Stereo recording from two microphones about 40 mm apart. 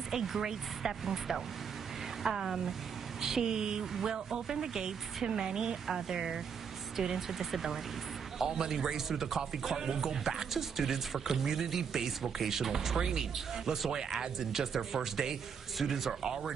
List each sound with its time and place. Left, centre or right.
0.1 s speech: centre